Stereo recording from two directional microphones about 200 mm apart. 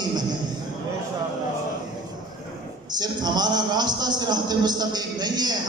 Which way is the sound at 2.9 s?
20° right (ahead or behind).